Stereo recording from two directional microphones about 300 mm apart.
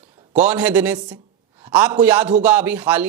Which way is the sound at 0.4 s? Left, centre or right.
Centre.